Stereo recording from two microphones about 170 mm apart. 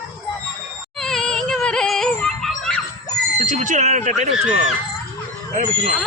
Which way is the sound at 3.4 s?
50° right (ahead or behind).